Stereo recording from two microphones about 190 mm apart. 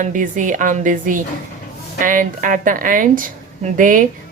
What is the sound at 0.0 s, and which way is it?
A woman's voice, 45° right (ahead or behind).